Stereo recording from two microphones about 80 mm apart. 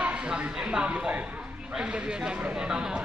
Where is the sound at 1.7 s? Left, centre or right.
Centre.